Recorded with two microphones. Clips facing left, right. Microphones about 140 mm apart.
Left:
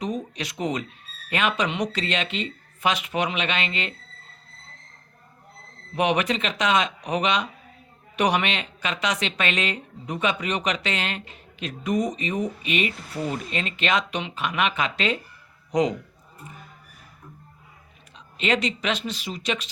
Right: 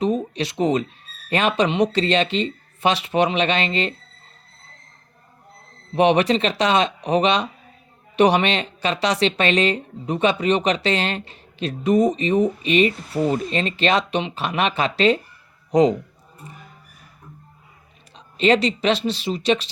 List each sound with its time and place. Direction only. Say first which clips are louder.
0.0 s a sound: right 8 dB; 30° right (ahead or behind)
1.3 s speech: right 5 dB; 30° right (ahead or behind)
6.0 s speech: right 6 dB; 30° right (ahead or behind)
18.3 s speech: right 7 dB; 30° right (ahead or behind)